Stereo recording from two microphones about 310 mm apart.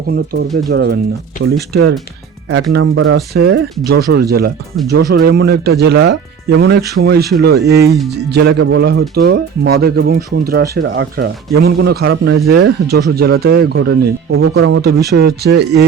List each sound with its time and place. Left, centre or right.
0.1 s speech: right